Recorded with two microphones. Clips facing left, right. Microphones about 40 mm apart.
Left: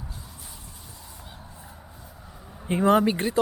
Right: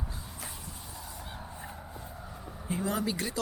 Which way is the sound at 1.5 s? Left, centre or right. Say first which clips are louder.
Right 3 dB; right.